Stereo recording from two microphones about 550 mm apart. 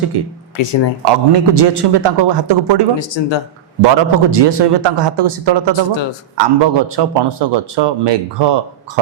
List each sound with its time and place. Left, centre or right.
0.1 s a man's voice: right
0.5 s speech: left
1.0 s a man's voice: right
3.0 s speech: left
3.8 s a man's voice: right